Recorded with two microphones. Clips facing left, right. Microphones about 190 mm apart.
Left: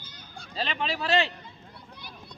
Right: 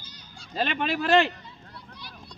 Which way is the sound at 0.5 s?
55° right (ahead or behind).